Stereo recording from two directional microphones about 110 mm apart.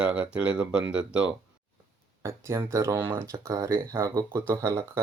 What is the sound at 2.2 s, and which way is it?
Speech, 25° right (ahead or behind).